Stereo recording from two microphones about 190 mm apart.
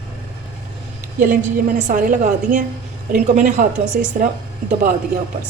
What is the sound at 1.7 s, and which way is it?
A woman's voice, 40° right (ahead or behind).